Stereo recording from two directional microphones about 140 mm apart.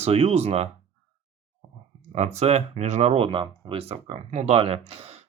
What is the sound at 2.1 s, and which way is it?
Speech, 50° right (ahead or behind).